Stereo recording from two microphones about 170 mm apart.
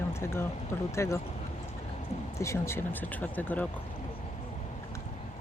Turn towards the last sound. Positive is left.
turn(degrees=10)  # may be behind; listen again after turning